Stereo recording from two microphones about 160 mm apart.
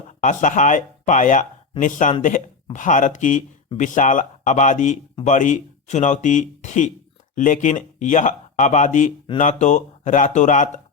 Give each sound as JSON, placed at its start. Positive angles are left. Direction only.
{"t": 0.2, "sound": "speech", "side_deg": 50}